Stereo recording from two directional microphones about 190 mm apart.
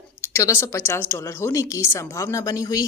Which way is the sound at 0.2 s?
15° left (ahead or behind).